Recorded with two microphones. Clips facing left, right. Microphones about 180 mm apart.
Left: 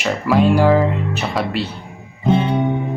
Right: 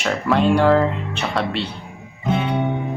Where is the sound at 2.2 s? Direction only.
30° left (ahead or behind).